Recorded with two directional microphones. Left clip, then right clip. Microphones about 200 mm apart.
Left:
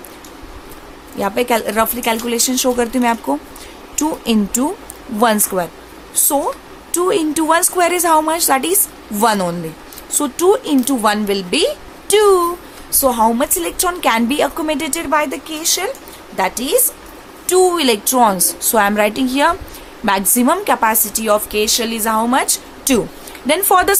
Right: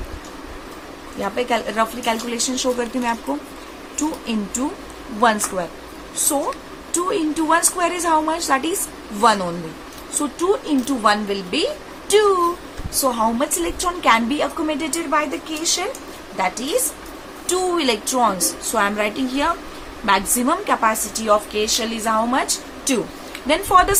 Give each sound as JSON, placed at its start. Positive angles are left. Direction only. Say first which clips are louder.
{"t": 1.2, "sound": "a woman's voice", "louder": "left 5 dB", "side_deg": 60}